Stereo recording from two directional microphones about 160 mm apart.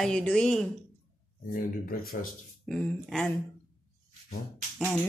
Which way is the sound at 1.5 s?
65° left (ahead or behind).